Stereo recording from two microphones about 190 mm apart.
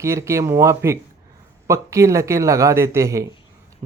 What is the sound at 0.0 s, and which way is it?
Speech, 15° right (ahead or behind).